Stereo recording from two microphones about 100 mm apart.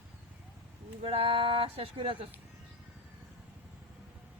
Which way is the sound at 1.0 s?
75° right (ahead or behind).